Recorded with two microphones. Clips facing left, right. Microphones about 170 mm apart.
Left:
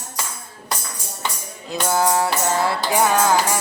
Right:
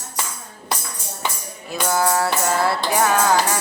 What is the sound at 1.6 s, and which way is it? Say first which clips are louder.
Music: left 1 dB; 20° left (ahead or behind).